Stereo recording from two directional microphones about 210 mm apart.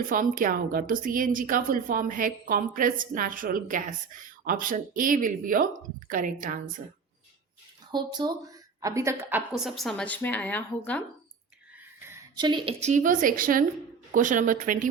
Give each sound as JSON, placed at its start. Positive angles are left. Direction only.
{"t": 0.1, "sound": "a woman's voice", "side_deg": -40}
{"t": 7.9, "sound": "a woman's voice", "side_deg": -20}
{"t": 11.9, "sound": "a woman's voice", "side_deg": -10}